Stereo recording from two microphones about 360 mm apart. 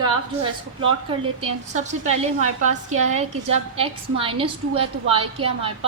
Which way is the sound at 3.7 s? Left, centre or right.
Centre.